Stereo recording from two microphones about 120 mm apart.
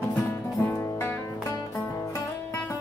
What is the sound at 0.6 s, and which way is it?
Music, 20° left (ahead or behind).